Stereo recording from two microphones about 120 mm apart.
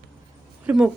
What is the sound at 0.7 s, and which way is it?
Speech, 10° right (ahead or behind).